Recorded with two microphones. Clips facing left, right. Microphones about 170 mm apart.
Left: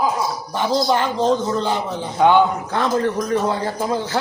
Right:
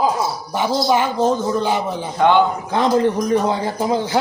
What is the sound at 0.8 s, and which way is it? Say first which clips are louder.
A man's voice: right 3 dB; 10° right (ahead or behind).